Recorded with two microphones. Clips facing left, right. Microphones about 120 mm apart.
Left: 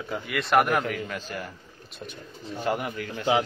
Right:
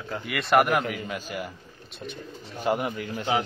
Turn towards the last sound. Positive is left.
turn(degrees=-20)  # may be behind; listen again after turning